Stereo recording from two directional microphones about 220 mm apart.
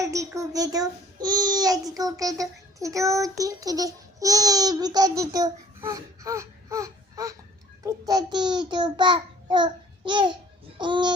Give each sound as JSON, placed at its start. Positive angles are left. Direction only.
{"t": 0.0, "sound": "a child's voice", "side_deg": -15}